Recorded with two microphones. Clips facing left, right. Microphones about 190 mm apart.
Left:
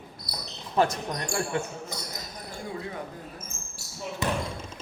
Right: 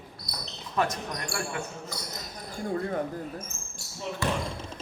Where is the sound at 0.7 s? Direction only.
30° left (ahead or behind).